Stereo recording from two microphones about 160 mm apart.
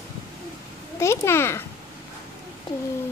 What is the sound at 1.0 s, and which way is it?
Speech, 15° left (ahead or behind).